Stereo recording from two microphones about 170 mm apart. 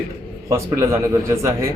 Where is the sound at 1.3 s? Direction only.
15° right (ahead or behind).